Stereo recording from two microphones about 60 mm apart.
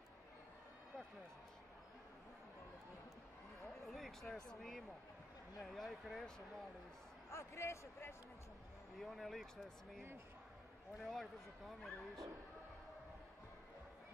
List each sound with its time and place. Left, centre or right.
3.8 s speech: centre
7.2 s speech: left
8.9 s speech: centre
11.0 s speech: centre